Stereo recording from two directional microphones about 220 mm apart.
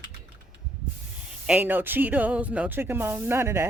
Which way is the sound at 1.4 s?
5° right (ahead or behind).